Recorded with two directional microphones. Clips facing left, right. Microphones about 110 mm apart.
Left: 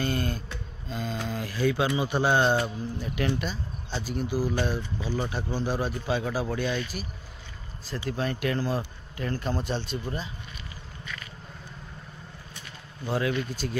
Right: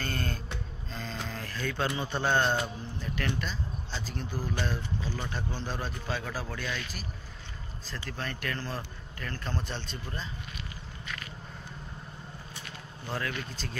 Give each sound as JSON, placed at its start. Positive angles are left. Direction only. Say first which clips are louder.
{"t": 0.0, "sound": "speech", "louder": "left 6 dB", "side_deg": 10}
{"t": 13.0, "sound": "speech", "louder": "left 8 dB", "side_deg": 15}